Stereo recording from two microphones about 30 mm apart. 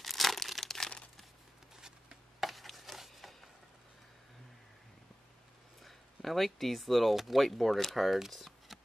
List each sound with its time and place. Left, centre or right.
0.0 s crumpling: centre
2.7 s chopping: centre
5.9 s speech: centre
8.3 s a sound: centre